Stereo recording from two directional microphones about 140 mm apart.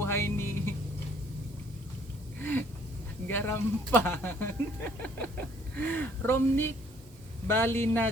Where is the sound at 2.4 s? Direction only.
15° left (ahead or behind).